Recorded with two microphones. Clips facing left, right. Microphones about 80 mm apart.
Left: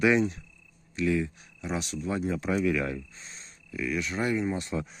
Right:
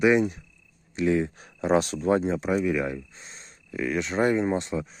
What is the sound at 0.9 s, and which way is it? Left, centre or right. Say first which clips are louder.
Speech: right 4 dB; right.